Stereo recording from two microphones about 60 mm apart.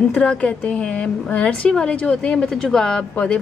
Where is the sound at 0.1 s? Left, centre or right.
Left.